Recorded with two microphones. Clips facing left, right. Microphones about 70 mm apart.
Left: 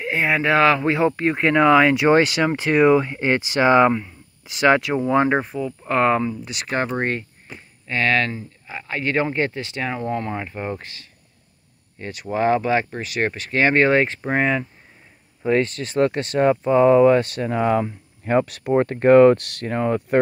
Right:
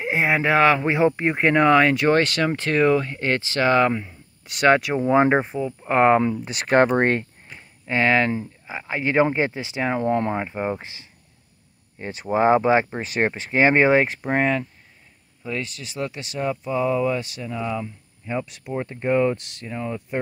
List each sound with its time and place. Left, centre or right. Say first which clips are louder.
0.0 s speech: even; centre
1.4 s speech: left 1 dB; centre
3.9 s speech: left 3 dB; centre
5.2 s speech: right 1 dB; right
6.4 s speech: right 7 dB; right
7.8 s speech: right 1 dB; right; by 14.6 s centre
15.4 s speech: left 10 dB; left